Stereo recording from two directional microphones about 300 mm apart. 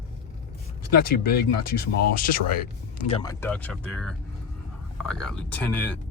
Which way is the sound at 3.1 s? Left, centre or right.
Centre.